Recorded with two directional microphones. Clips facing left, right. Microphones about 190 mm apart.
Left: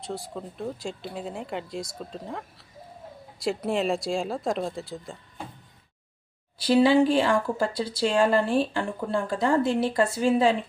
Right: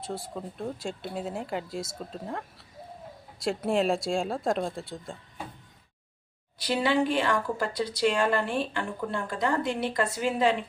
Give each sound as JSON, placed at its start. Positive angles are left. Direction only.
{"t": 0.0, "sound": "speech", "side_deg": 0}
{"t": 6.6, "sound": "speech", "side_deg": 30}